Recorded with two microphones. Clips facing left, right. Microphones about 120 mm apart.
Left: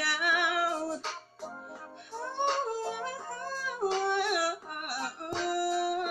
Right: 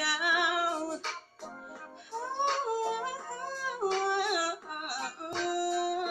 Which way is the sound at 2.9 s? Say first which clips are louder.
Right 1 dB; 15° right (ahead or behind).